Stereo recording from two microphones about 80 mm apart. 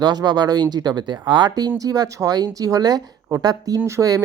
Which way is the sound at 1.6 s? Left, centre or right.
Right.